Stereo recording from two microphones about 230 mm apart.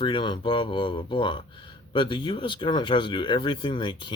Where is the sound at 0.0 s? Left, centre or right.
Left.